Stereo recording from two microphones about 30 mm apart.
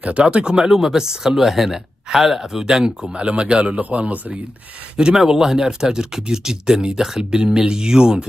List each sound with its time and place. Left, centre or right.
0.3 s a man's voice: right
0.6 s speech: centre
3.2 s a man's voice: right
5.0 s speech: right